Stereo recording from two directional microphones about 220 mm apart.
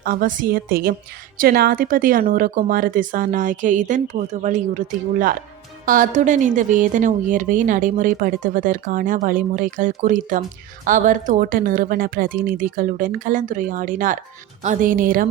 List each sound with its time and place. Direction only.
0.0 s a woman's voice: 40° right (ahead or behind)